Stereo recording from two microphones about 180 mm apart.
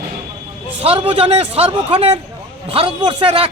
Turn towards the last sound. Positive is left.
turn(degrees=-30)  # may be behind; listen again after turning